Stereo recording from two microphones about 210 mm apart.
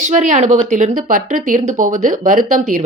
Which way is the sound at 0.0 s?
35° right (ahead or behind).